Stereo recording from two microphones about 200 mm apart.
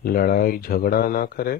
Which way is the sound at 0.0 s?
45° left (ahead or behind).